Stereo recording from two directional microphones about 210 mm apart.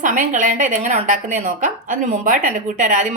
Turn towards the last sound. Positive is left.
turn(degrees=-40)  # may be behind; listen again after turning